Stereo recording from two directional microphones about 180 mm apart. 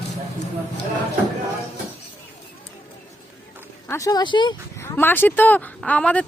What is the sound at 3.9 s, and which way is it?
Speech, 15° left (ahead or behind).